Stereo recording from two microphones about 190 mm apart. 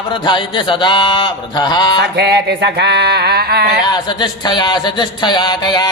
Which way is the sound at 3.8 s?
20° left (ahead or behind).